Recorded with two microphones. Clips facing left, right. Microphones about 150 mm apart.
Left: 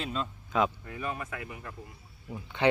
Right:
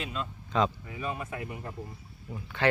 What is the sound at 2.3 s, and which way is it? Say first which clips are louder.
Speech: left 1 dB; 20° left (ahead or behind).